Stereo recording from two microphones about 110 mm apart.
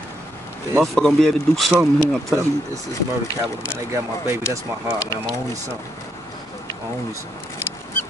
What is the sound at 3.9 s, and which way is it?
Speech, 25° right (ahead or behind).